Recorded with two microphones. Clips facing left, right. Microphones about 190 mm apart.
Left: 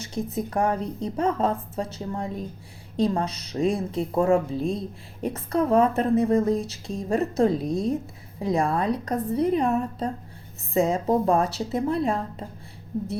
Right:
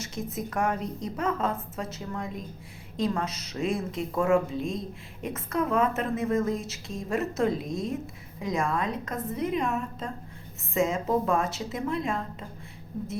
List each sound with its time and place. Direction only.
0.0 s a woman's voice: 30° left (ahead or behind)